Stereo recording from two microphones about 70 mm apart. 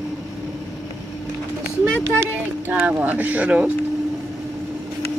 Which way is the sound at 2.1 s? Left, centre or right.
Right.